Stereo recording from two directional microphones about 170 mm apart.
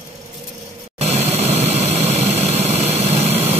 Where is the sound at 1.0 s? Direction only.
40° right (ahead or behind).